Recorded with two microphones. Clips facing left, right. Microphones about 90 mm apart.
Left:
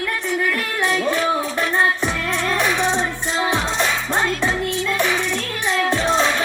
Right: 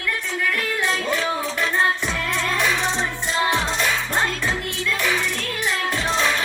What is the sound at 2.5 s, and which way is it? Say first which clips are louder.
Music: left 4 dB; 25° left (ahead or behind).